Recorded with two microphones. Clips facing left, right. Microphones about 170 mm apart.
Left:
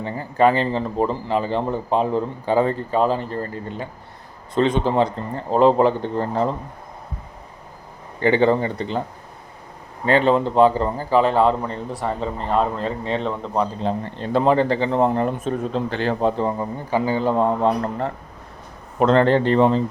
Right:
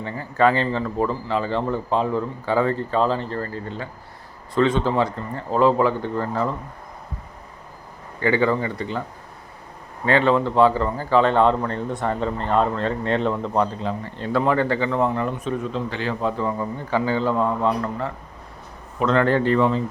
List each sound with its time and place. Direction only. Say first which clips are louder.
0.0 s a man's voice: left 2 dB; 15° left (ahead or behind)
8.2 s a man's voice: left 3 dB; 25° left (ahead or behind)
10.1 s a man's voice: left 1 dB; 15° left (ahead or behind); by 13.7 s centre (ahead or behind)
13.8 s speech: left 3 dB; 25° left (ahead or behind); by 16.1 s 45° left (ahead or behind)
16.2 s a man's voice: left 2 dB; 30° left (ahead or behind)
16.9 s a man's voice: left 2 dB; 15° left (ahead or behind)
17.7 s speech: left 2 dB; 40° left (ahead or behind)
19.0 s a man's voice: left 3 dB; 30° left (ahead or behind)